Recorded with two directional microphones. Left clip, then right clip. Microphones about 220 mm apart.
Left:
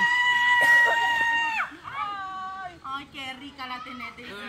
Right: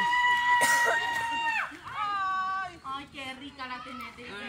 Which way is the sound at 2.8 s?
15° left (ahead or behind).